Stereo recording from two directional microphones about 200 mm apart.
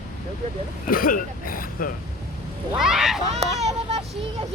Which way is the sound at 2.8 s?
Centre (ahead or behind).